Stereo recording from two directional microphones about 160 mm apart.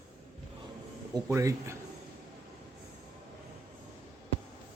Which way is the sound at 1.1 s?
20° right (ahead or behind).